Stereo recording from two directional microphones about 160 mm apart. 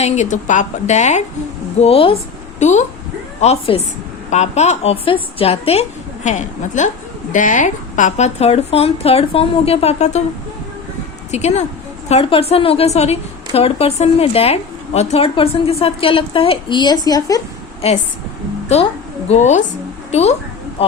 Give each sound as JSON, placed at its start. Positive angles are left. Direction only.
{"t": 0.0, "sound": "a woman's voice", "side_deg": 50}
{"t": 1.8, "sound": "a woman's voice", "side_deg": 35}
{"t": 2.6, "sound": "a woman's voice", "side_deg": 45}
{"t": 11.3, "sound": "a woman's voice", "side_deg": 45}
{"t": 19.3, "sound": "a woman's voice", "side_deg": 45}